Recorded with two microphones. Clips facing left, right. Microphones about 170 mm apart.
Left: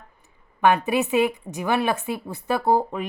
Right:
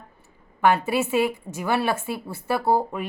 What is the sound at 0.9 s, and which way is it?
A woman's voice, 15° left (ahead or behind).